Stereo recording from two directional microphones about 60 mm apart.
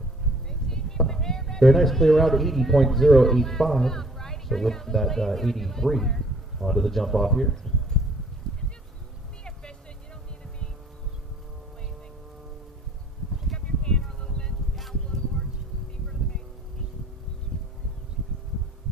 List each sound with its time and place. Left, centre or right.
0.5 s speech: centre
9.4 s vehicle: centre
13.6 s a sound: centre